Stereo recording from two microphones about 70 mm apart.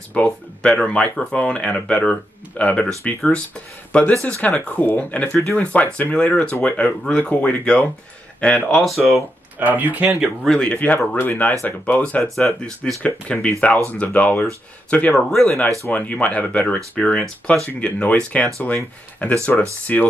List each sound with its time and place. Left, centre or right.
0.1 s speech: centre
8.8 s speech: centre
9.6 s speech: right
10.0 s speech: centre
10.5 s speech: centre
12.2 s speech: centre; by 15.1 s left
15.1 s speech: centre
15.9 s speech: centre
17.0 s speech: centre
17.7 s speech: centre